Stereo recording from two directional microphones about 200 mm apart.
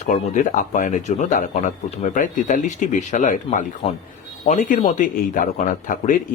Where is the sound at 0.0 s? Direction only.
40° left (ahead or behind).